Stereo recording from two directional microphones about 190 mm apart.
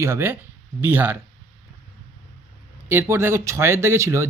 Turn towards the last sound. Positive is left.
turn(degrees=-15)  # may be behind; listen again after turning